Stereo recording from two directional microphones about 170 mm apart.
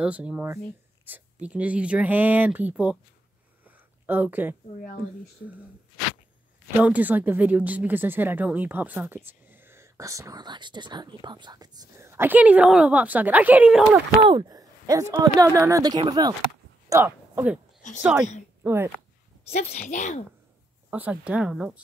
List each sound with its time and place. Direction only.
0.0 s speech: 5° right (ahead or behind)
3.6 s a sound: 10° right (ahead or behind)
6.8 s speech: 10° right (ahead or behind)
14.2 s speech: 25° right (ahead or behind)
16.9 s speech: 10° right (ahead or behind)
17.8 s speech: 45° left (ahead or behind)
18.6 s speech: 15° right (ahead or behind)
19.5 s a woman's voice: 45° left (ahead or behind)
20.9 s speech: 10° right (ahead or behind)